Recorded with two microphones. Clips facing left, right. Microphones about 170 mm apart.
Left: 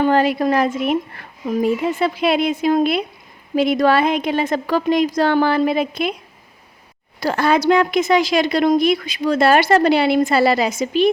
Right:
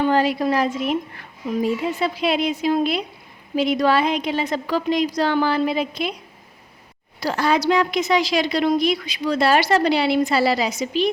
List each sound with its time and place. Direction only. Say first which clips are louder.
0.0 s a woman's voice: left 3 dB; 55° left (ahead or behind)
7.2 s a woman's voice: left 3 dB; 55° left (ahead or behind)